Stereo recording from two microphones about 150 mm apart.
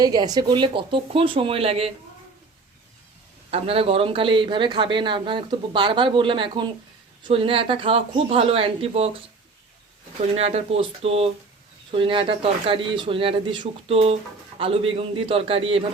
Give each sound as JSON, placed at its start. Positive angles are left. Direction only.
{"t": 0.0, "sound": "speech", "side_deg": -25}
{"t": 3.5, "sound": "speech", "side_deg": -40}
{"t": 10.3, "sound": "speech", "side_deg": -45}